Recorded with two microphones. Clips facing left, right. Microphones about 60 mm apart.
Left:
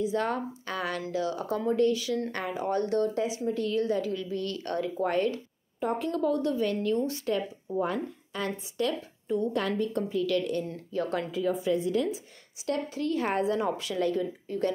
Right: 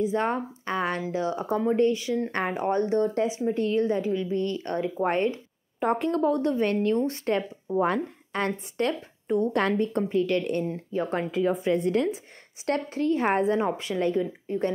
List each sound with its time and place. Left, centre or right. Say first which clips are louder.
0.0 s a woman's voice: right 3 dB; right
2.3 s a woman's voice: right 5 dB; right
2.7 s a woman's voice: right 2 dB; right
5.8 s a woman's voice: right 4 dB; right
6.0 s a woman's voice: right 2 dB; right
13.0 s a woman's voice: right 5 dB; right